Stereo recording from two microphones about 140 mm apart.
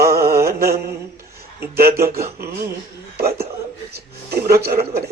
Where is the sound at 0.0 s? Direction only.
90° right.